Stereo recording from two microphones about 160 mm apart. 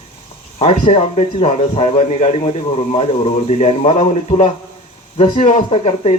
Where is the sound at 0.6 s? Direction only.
40° left (ahead or behind).